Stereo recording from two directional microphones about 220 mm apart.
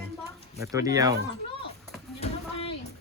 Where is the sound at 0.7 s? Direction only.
15° right (ahead or behind).